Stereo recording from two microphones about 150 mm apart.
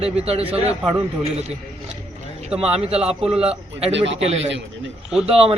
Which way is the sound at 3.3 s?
40° right (ahead or behind).